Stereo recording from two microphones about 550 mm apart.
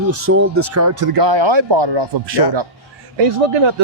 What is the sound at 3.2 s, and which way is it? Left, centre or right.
Speech, right.